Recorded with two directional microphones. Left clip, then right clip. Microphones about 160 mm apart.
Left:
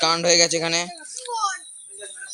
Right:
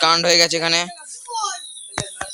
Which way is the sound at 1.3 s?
60° right (ahead or behind).